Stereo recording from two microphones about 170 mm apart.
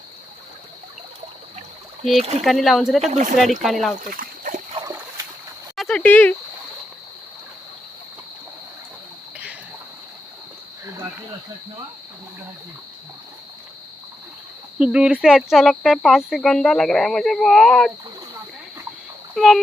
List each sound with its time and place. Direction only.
2.4 s speech: centre (ahead or behind)
3.0 s speech: 45° right (ahead or behind)
3.6 s speech: centre (ahead or behind)
4.1 s a sound: 50° right (ahead or behind)
5.7 s a sound: centre (ahead or behind)
6.0 s speech: 10° left (ahead or behind)
14.8 s speech: 5° right (ahead or behind)
19.3 s speech: centre (ahead or behind)